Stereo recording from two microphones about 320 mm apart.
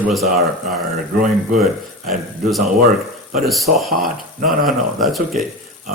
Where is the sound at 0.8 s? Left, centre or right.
Right.